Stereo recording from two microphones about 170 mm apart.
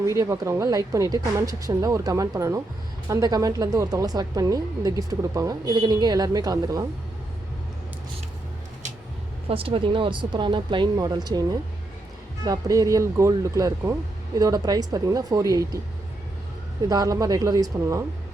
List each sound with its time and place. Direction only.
0.0 s speech: 20° right (ahead or behind)
9.5 s speech: 30° right (ahead or behind)
12.5 s speech: 20° right (ahead or behind)
16.9 s speech: 20° right (ahead or behind)